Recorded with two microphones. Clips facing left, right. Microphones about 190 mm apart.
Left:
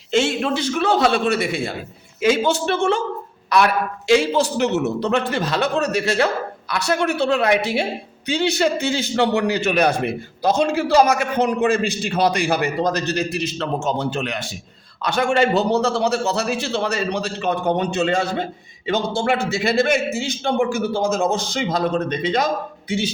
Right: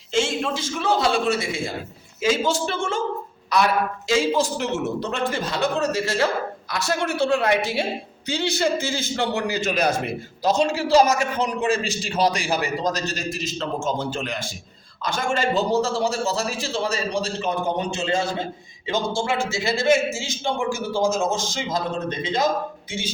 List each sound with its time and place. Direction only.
0.1 s a man's voice: 65° left (ahead or behind)